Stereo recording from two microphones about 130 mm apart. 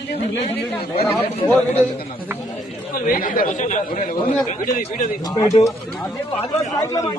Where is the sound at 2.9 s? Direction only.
90° left.